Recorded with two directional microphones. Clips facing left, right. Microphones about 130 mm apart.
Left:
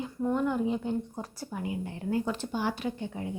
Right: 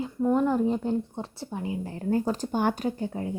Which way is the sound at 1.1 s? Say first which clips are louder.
Right 3 dB; 25° right (ahead or behind).